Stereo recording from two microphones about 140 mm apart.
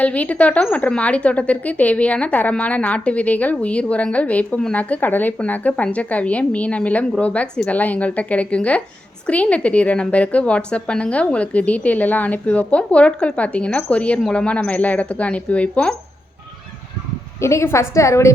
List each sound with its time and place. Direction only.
0.0 s a woman's voice: 10° left (ahead or behind)
17.4 s a woman's voice: 20° left (ahead or behind)